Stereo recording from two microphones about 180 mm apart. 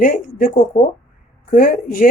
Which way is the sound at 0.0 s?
50° left (ahead or behind).